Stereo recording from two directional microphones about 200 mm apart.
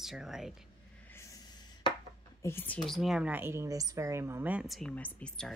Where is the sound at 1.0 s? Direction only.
15° left (ahead or behind).